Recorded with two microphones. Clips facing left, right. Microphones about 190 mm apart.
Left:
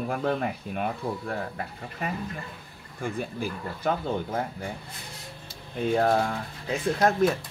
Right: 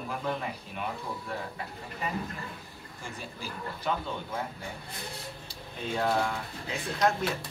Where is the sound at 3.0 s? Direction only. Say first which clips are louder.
Left 11 dB; 55° left (ahead or behind).